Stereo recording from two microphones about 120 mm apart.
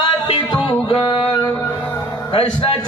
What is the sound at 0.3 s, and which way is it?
Music, 40° left (ahead or behind).